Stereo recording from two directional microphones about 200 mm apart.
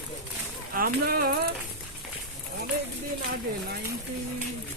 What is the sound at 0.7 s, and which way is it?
Speech, 45° right (ahead or behind).